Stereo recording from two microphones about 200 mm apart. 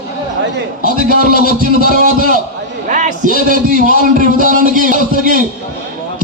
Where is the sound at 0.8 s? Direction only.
40° right (ahead or behind).